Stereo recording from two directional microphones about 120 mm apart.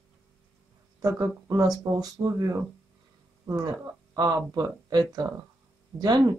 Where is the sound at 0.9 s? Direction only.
30° right (ahead or behind).